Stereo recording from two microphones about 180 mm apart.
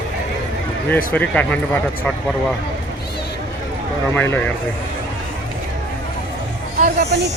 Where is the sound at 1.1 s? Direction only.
10° left (ahead or behind).